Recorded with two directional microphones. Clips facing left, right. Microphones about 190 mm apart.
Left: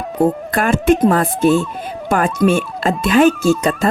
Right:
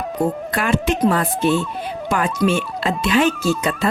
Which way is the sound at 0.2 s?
50° left (ahead or behind).